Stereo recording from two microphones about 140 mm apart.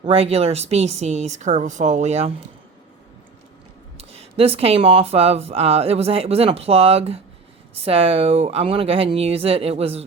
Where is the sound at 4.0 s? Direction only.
45° right (ahead or behind).